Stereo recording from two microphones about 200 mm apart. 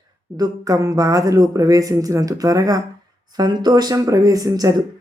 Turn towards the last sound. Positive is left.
turn(degrees=-15)  # may be behind; listen again after turning